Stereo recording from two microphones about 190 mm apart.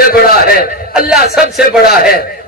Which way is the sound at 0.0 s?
50° left (ahead or behind).